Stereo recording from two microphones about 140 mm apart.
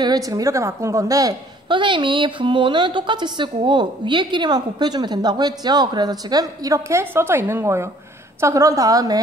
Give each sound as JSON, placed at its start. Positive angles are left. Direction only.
{"t": 0.0, "sound": "a woman's voice", "side_deg": -25}